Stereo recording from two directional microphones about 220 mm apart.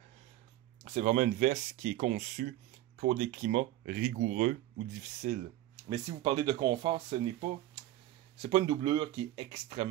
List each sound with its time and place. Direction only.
0.9 s speech: 35° right (ahead or behind)
5.9 s speech: 20° right (ahead or behind)